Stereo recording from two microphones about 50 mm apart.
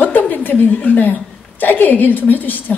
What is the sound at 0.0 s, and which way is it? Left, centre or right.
Chuckle, left.